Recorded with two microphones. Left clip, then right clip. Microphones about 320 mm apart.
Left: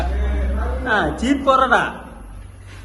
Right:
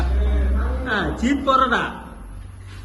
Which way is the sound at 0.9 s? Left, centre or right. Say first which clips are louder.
Left 4 dB; centre.